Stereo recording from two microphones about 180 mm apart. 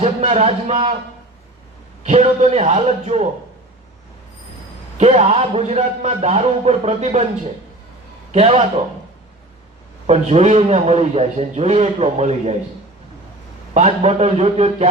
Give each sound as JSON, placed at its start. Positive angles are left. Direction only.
{"t": 0.0, "sound": "a man's voice", "side_deg": -40}
{"t": 2.0, "sound": "a man's voice", "side_deg": -35}
{"t": 4.9, "sound": "a man's voice", "side_deg": -40}
{"t": 8.3, "sound": "a man's voice", "side_deg": -35}
{"t": 10.1, "sound": "a man's voice", "side_deg": -35}
{"t": 13.7, "sound": "a man's voice", "side_deg": -40}